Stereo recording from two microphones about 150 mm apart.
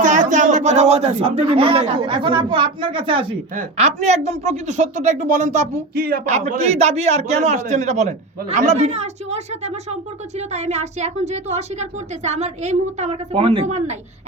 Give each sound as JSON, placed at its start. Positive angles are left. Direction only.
{"t": 0.0, "sound": "speech", "side_deg": -55}
{"t": 3.8, "sound": "a woman's voice", "side_deg": -50}
{"t": 5.9, "sound": "a woman's voice", "side_deg": -80}
{"t": 6.2, "sound": "a woman's voice", "side_deg": -50}